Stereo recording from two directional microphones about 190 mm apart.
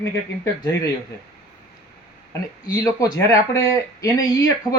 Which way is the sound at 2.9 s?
15° left (ahead or behind).